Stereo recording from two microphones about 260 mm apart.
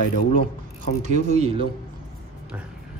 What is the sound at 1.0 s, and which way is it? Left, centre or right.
Speech, right.